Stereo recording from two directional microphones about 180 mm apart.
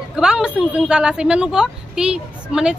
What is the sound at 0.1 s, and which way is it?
A woman's voice, 5° right (ahead or behind).